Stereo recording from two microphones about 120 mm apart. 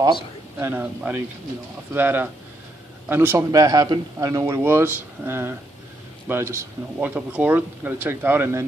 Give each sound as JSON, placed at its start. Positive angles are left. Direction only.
{"t": 0.6, "sound": "speech", "side_deg": -15}